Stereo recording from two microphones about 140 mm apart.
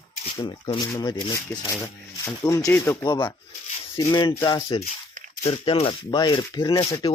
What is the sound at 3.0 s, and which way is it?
Speech, 35° left (ahead or behind).